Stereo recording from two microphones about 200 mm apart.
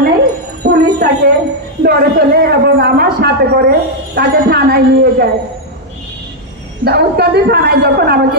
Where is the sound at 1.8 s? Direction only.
50° right (ahead or behind).